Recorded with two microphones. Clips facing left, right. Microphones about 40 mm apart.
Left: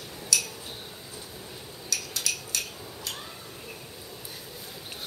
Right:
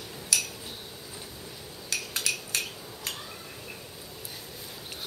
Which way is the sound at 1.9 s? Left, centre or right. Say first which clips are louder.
Right 1 dB; right.